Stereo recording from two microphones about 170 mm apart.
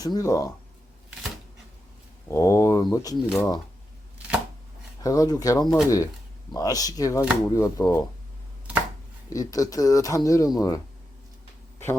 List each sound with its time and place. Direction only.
0.0 s speech: 20° left (ahead or behind)
2.3 s speech: 15° left (ahead or behind)
3.2 s speech: centre (ahead or behind)
4.9 s speech: 20° left (ahead or behind)
9.3 s speech: 20° left (ahead or behind)